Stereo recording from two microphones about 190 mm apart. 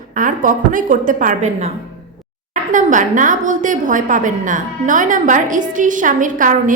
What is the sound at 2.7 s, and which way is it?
A woman's voice, 40° right (ahead or behind).